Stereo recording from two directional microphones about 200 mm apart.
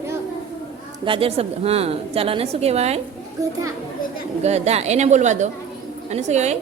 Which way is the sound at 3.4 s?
15° right (ahead or behind).